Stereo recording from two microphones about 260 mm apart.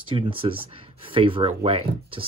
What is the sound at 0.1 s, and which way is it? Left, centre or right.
Speech, centre.